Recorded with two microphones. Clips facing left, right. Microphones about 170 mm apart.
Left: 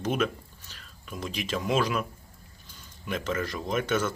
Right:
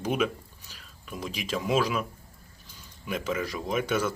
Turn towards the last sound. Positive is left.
turn(degrees=-10)  # may be behind; listen again after turning